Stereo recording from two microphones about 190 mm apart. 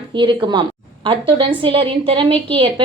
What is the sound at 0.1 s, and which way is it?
A woman's voice, 25° right (ahead or behind).